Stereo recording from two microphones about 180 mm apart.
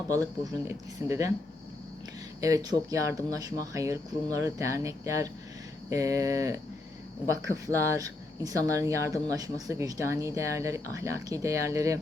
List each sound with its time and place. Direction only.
0.7 s speech: 15° right (ahead or behind)
2.4 s speech: 20° right (ahead or behind)